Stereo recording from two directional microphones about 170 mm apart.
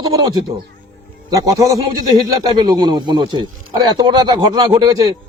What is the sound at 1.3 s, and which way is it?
A man's voice, 20° right (ahead or behind).